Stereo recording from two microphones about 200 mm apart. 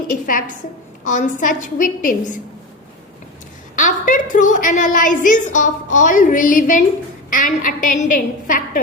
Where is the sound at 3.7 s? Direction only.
40° left (ahead or behind).